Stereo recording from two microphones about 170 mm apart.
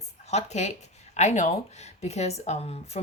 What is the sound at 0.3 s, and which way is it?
Speech, 40° left (ahead or behind).